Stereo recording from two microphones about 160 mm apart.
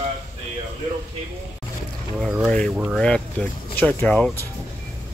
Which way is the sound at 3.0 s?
5° left (ahead or behind).